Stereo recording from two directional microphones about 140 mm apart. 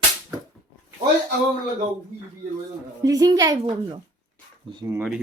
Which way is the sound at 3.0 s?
25° right (ahead or behind).